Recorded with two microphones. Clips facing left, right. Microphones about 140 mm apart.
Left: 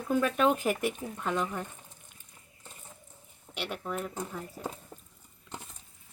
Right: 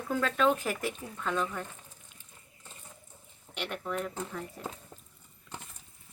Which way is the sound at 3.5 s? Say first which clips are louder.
Even; 5° left (ahead or behind).